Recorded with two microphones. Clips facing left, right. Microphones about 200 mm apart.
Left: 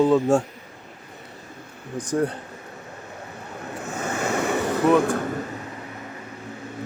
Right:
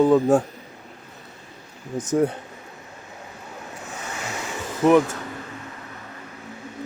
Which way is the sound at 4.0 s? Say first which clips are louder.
Left 9 dB; 50° left (ahead or behind).